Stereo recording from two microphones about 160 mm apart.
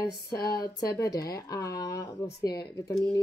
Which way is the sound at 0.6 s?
20° left (ahead or behind).